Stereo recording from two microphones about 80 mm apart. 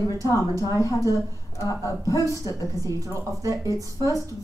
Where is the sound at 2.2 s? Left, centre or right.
Right.